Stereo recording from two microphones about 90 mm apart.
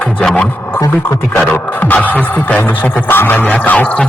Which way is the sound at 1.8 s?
20° left (ahead or behind).